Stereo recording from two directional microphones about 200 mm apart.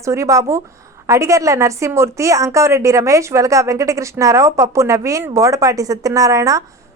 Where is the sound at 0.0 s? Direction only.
15° right (ahead or behind).